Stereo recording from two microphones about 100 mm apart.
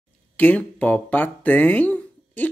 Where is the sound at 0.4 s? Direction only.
15° left (ahead or behind).